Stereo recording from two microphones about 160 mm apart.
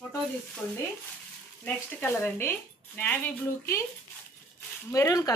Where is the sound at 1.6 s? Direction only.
15° left (ahead or behind).